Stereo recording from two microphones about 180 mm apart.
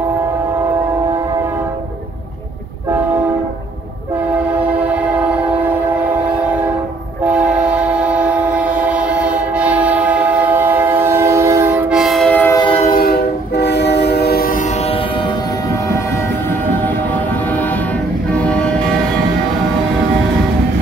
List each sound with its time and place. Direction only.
7.6 s train: 5° right (ahead or behind)
11.9 s train: centre (ahead or behind)
12.9 s train: 60° left (ahead or behind)